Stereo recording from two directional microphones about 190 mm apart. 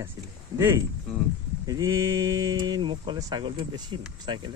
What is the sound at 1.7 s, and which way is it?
Speech, 20° right (ahead or behind).